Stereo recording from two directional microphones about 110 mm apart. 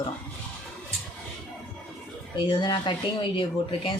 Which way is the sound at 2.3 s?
45° left (ahead or behind).